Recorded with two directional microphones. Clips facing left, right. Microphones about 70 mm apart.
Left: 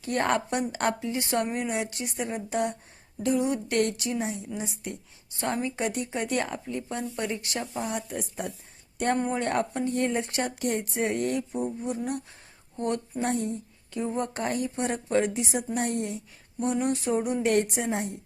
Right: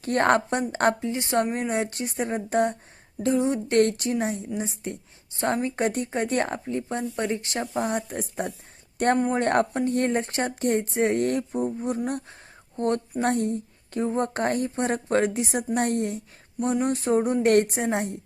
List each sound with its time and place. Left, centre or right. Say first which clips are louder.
0.0 s a woman's voice: right 5 dB; right
3.2 s a woman's voice: right 3 dB; right
13.2 s a woman's voice: right 4 dB; right
14.2 s a woman's voice: right 4 dB; right
17.4 s a woman's voice: right 4 dB; right